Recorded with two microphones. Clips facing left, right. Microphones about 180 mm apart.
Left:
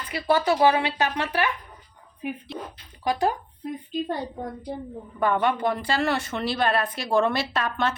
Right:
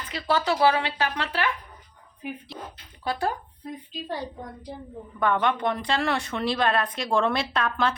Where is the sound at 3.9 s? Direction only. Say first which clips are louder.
Left 5 dB; 55° left (ahead or behind).